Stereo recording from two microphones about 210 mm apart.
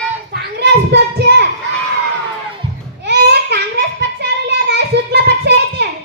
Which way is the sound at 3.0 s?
50° right (ahead or behind).